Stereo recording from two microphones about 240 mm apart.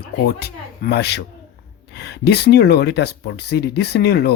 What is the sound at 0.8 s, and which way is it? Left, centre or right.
Speech, left.